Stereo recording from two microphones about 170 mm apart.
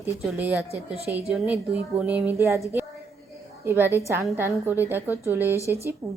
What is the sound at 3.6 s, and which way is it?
Speech, 15° right (ahead or behind).